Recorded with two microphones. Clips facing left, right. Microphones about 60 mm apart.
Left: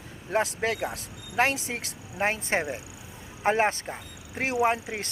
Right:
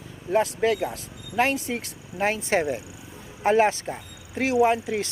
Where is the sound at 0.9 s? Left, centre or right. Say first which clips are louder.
Right 2 dB; left.